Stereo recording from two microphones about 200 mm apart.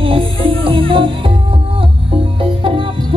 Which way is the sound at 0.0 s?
25° right (ahead or behind).